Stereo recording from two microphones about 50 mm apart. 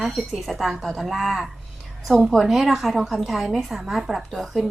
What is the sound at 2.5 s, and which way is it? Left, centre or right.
A woman's voice, centre.